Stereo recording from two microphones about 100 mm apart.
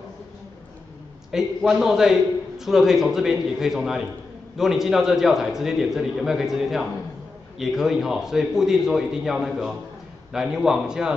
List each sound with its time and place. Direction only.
1.3 s a man's voice: 5° right (ahead or behind)